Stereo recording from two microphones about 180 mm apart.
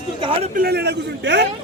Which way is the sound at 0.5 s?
60° right (ahead or behind).